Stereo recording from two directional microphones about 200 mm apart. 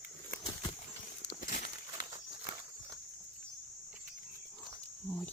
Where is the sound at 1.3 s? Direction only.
40° left (ahead or behind).